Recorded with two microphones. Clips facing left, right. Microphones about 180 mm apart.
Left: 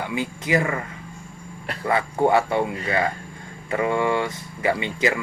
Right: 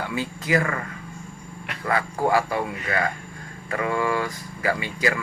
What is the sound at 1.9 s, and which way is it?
A man's voice, 25° left (ahead or behind).